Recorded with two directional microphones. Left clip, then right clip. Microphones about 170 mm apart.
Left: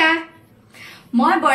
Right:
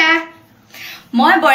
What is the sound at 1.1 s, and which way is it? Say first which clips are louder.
Speech: right 5 dB; 10° left (ahead or behind).